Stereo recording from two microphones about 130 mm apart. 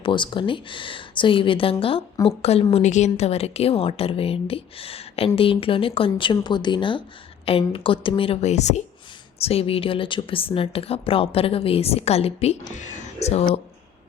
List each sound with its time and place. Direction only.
0.0 s speech: 40° left (ahead or behind); by 8.8 s 60° left (ahead or behind)
9.4 s speech: 50° left (ahead or behind)
12.7 s speech: 70° left (ahead or behind)